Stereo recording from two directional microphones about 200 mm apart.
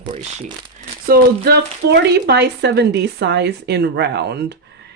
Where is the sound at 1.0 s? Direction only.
50° right (ahead or behind).